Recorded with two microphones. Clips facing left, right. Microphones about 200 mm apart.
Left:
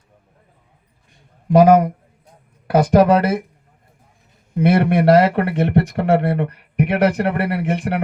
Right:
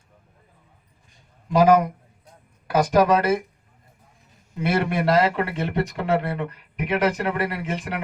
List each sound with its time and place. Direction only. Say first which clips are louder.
1.5 s speech: left 5 dB; 55° left (ahead or behind)
4.5 s speech: left 7 dB; 60° left (ahead or behind)